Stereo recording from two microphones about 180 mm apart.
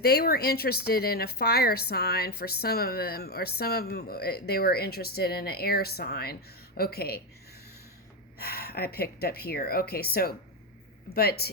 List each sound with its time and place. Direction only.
0.0 s a woman's voice: 60° left (ahead or behind)
8.4 s a woman's voice: 60° left (ahead or behind)